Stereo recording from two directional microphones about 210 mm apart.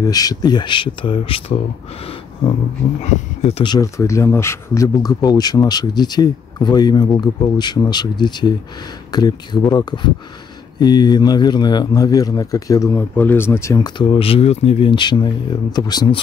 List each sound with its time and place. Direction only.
0.0 s speech: 20° left (ahead or behind)
3.0 s speech: 30° left (ahead or behind)